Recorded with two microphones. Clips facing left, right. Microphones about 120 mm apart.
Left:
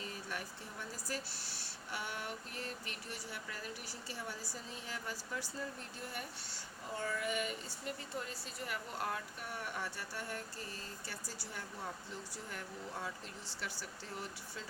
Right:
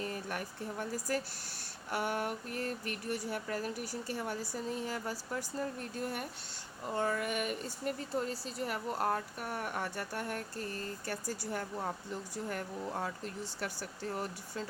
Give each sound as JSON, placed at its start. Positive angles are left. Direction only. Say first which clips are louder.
{"t": 0.0, "sound": "speech", "louder": "right 6 dB", "side_deg": -50}
{"t": 6.9, "sound": "female singing", "louder": "right 5 dB", "side_deg": -60}
{"t": 8.1, "sound": "speech", "louder": "right 8 dB", "side_deg": -35}